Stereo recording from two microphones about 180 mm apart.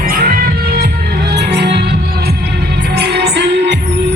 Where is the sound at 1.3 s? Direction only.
70° right (ahead or behind).